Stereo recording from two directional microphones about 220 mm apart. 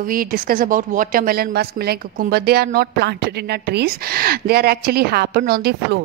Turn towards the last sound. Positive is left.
turn(degrees=-45)  # may be behind; listen again after turning